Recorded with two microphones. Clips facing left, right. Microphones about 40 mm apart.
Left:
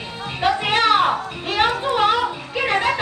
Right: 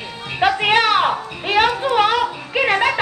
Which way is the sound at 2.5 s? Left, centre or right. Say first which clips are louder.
Right 4 dB; right.